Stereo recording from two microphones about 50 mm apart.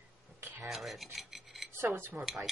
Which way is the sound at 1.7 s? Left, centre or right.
Right.